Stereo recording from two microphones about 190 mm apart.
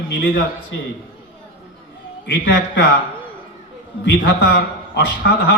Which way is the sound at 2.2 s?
55° left (ahead or behind).